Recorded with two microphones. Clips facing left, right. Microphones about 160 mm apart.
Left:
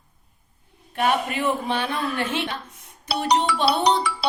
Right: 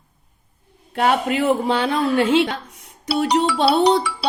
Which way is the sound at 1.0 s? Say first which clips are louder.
Right 5 dB; 90° right.